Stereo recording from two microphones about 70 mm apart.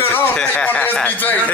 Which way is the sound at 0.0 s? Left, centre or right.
Left.